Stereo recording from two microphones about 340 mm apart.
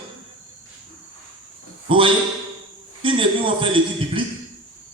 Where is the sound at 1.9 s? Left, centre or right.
Centre.